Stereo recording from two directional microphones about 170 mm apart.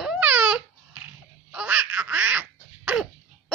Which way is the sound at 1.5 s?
10° right (ahead or behind).